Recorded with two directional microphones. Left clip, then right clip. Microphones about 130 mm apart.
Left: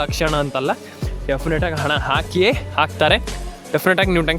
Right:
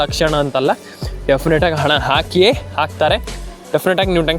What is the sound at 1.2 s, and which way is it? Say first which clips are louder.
Speech: right 7 dB; 30° right (ahead or behind).